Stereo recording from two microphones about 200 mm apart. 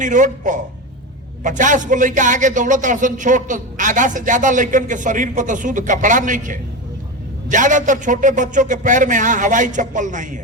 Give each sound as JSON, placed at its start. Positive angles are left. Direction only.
{"t": 0.0, "sound": "speech", "side_deg": -40}